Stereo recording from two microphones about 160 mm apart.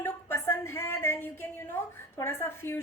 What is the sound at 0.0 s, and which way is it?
A woman's voice, 15° left (ahead or behind).